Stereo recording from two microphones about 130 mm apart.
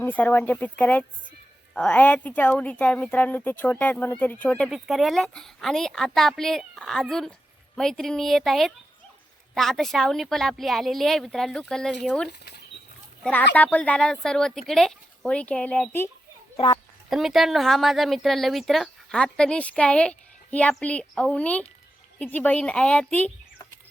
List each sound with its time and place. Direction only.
0.0 s speech: 15° left (ahead or behind)
17.1 s speech: centre (ahead or behind)